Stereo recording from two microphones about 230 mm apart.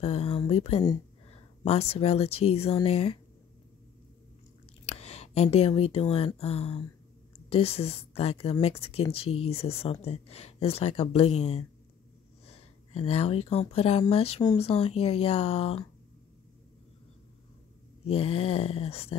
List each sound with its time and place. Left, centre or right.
0.0 s speech: left
4.8 s speech: left
18.0 s speech: left